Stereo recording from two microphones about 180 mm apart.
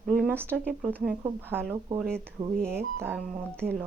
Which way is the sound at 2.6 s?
15° right (ahead or behind).